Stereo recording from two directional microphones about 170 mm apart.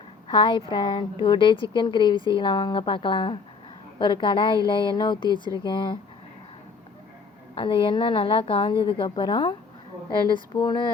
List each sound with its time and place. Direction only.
0.3 s speech: 30° left (ahead or behind)
7.5 s speech: 30° left (ahead or behind)